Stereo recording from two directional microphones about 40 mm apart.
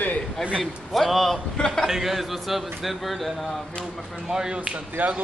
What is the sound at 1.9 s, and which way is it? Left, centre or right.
A man's voice, centre.